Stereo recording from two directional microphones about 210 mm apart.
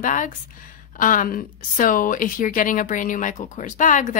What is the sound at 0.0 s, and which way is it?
Speech, 40° left (ahead or behind).